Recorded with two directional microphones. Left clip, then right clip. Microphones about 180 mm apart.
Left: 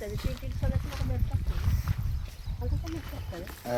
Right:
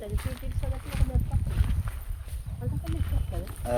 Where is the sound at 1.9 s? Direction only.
35° left (ahead or behind).